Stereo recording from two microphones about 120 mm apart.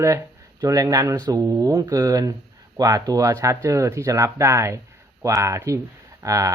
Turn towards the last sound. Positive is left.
turn(degrees=-30)  # may be behind; listen again after turning